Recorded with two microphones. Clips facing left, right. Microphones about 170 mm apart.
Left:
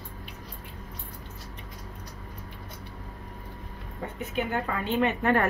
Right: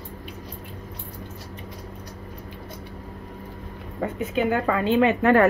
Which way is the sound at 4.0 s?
90° right.